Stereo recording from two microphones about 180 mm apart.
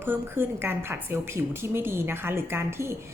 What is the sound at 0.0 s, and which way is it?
A woman's voice, 10° right (ahead or behind).